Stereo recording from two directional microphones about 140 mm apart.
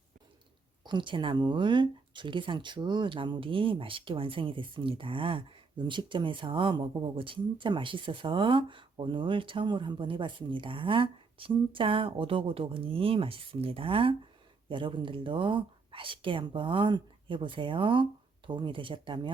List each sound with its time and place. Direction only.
0.9 s speech: 35° right (ahead or behind)